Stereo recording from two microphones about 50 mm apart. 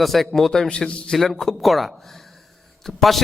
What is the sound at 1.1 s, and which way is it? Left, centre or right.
A man's voice, centre.